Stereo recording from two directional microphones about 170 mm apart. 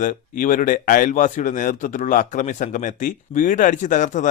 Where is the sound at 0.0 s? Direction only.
50° left (ahead or behind).